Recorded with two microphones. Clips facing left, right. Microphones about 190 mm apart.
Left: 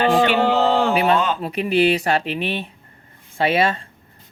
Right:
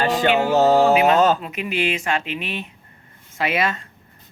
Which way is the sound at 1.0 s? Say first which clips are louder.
Right 3 dB; 40° right (ahead or behind).